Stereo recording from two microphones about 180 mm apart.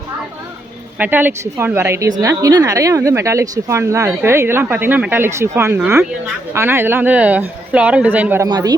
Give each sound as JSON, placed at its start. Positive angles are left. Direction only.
{"t": 0.9, "sound": "speech", "side_deg": -10}
{"t": 8.4, "sound": "speech", "side_deg": -25}